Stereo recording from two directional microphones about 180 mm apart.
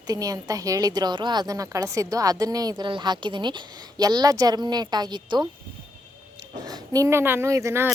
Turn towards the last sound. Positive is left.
turn(degrees=-15)  # may be behind; listen again after turning